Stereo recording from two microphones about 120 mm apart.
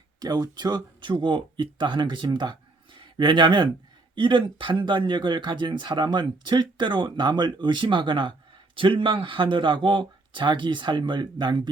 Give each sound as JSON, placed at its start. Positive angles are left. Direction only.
{"t": 0.2, "sound": "speech", "side_deg": -35}